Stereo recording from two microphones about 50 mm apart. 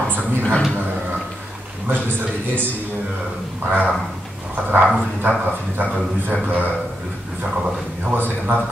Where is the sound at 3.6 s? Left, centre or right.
Right.